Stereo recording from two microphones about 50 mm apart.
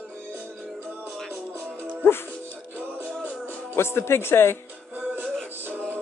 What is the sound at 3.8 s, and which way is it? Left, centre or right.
Speech, left.